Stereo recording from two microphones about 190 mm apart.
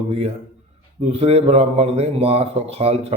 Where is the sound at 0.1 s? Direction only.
35° right (ahead or behind).